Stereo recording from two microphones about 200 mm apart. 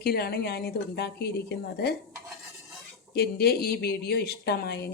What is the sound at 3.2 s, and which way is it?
A woman's voice, 50° left (ahead or behind).